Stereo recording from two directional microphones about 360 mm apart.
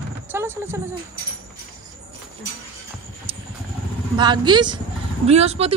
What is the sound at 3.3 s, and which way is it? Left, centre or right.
Vehicle, centre.